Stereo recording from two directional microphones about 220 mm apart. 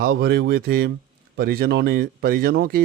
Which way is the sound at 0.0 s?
50° right (ahead or behind).